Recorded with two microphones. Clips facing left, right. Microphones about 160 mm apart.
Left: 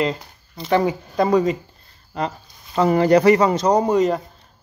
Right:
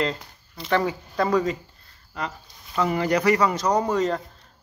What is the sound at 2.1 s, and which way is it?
Speech, 30° left (ahead or behind).